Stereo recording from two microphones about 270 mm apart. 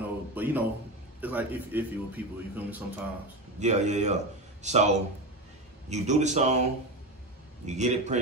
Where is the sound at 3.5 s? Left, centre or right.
Right.